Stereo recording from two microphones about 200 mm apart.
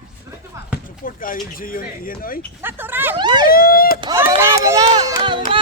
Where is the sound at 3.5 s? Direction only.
50° left (ahead or behind).